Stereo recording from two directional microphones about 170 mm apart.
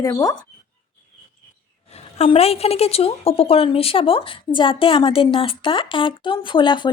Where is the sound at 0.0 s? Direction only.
20° left (ahead or behind).